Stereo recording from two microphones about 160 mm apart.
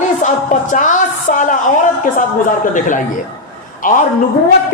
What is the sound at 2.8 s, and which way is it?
Speech, 50° left (ahead or behind).